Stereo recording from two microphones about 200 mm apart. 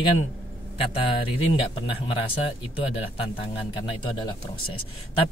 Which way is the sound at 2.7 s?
25° left (ahead or behind).